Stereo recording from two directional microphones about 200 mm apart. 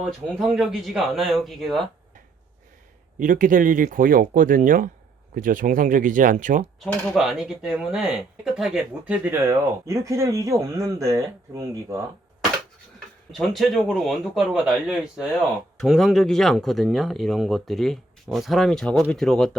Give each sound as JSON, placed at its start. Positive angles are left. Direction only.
{"t": 0.0, "sound": "speech", "side_deg": 0}
{"t": 3.2, "sound": "speech", "side_deg": -40}
{"t": 6.7, "sound": "speech", "side_deg": 0}
{"t": 13.3, "sound": "speech", "side_deg": 0}